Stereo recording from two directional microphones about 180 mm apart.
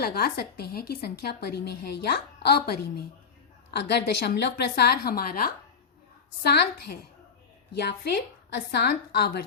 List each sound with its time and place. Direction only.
0.0 s a woman's voice: 55° left (ahead or behind)